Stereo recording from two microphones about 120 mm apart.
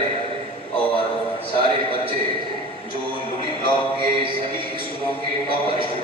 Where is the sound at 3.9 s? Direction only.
45° right (ahead or behind).